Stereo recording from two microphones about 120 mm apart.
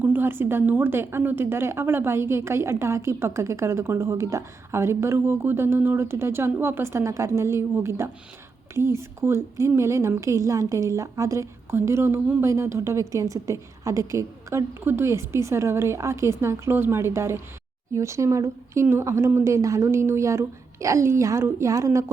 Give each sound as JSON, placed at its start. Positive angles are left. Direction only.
{"t": 0.0, "sound": "a woman's voice", "side_deg": -15}